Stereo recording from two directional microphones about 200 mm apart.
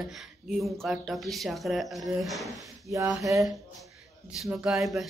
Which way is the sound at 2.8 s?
15° right (ahead or behind).